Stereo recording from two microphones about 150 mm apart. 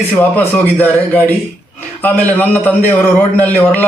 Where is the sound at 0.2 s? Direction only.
10° left (ahead or behind).